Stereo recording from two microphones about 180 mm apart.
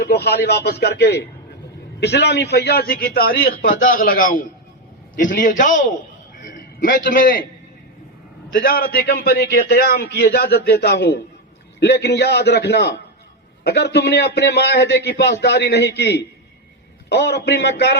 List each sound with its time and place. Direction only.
0.0 s a man's voice: 65° left (ahead or behind); by 5.8 s 45° left (ahead or behind)
6.8 s a man's voice: 50° left (ahead or behind)
8.5 s a man's voice: 55° left (ahead or behind)